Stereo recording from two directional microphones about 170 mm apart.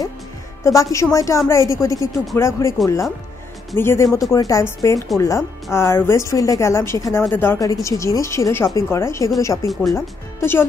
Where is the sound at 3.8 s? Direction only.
15° left (ahead or behind).